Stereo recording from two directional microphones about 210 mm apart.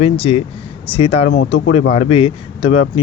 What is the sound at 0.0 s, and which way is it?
Speech, 25° left (ahead or behind).